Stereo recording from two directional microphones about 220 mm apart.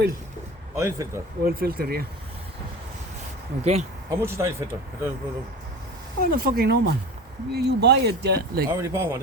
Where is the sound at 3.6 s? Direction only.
30° right (ahead or behind).